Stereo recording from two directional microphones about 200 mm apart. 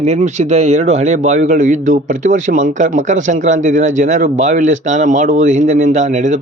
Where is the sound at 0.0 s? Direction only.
35° right (ahead or behind).